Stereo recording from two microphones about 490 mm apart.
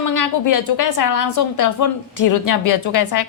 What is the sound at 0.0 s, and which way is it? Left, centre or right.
A woman's voice, left.